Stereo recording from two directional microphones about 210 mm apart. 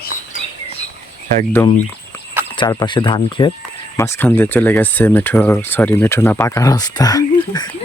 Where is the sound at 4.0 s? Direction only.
10° left (ahead or behind).